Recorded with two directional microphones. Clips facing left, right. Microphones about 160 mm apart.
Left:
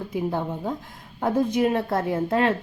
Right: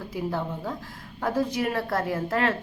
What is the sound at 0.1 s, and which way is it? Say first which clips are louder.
A woman's voice: left 3 dB; 20° left (ahead or behind).